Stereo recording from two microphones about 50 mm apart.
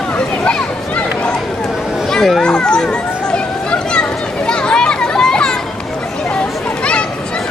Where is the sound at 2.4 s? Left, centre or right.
Centre.